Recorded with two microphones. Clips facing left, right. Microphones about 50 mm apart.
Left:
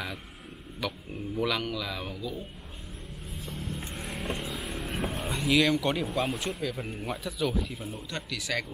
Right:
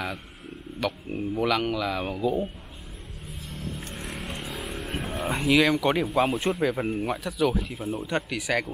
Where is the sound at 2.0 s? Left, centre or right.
Right.